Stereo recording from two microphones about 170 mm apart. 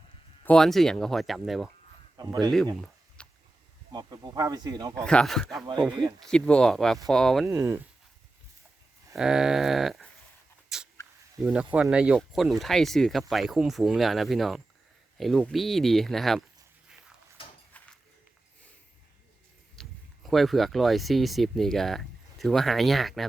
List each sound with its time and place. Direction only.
0.4 s speech: 5° left (ahead or behind)
2.1 s speech: 25° right (ahead or behind)
3.2 s a sound: 5° left (ahead or behind)
3.9 s speech: 25° right (ahead or behind)
4.9 s speech: 5° left (ahead or behind)
7.5 s speech: 15° right (ahead or behind)
9.1 s speech: 5° right (ahead or behind)
10.7 s dog: 5° right (ahead or behind)
11.7 s speech: 5° right (ahead or behind)
17.7 s a sound: 10° left (ahead or behind)
19.7 s speech: 5° left (ahead or behind)